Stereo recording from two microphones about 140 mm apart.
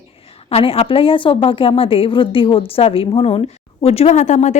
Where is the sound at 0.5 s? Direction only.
45° left (ahead or behind).